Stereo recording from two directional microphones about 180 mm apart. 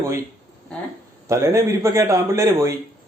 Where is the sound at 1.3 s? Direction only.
15° right (ahead or behind).